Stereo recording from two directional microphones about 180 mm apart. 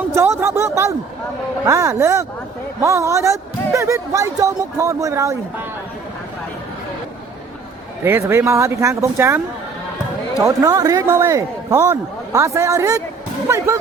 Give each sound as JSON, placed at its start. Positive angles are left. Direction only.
{"t": 0.1, "sound": "a sound", "side_deg": -15}
{"t": 1.6, "sound": "a man's voice", "side_deg": -15}
{"t": 8.0, "sound": "a man's voice", "side_deg": -15}
{"t": 10.4, "sound": "a man's voice", "side_deg": -20}